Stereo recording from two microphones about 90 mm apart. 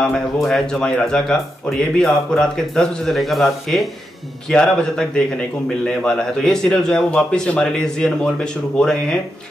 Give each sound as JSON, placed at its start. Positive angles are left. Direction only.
{"t": 0.0, "sound": "a man's voice", "side_deg": 5}